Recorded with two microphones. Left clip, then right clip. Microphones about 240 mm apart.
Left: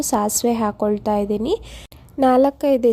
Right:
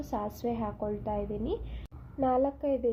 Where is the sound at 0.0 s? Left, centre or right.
Left.